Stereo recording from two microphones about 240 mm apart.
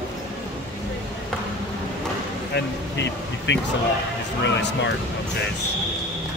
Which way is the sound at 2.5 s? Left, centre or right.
Left.